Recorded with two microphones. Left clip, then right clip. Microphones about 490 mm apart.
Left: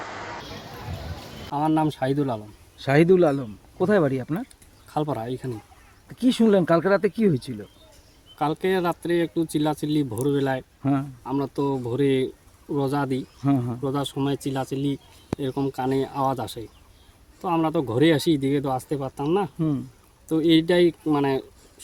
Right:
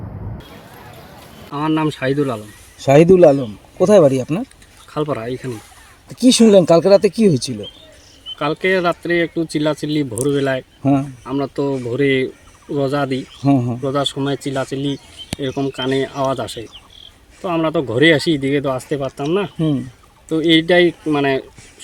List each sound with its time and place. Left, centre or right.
1.5 s speech: left
2.7 s speech: centre
5.0 s speech: left
6.2 s speech: centre
8.4 s speech: left
13.4 s speech: left
13.8 s speech: left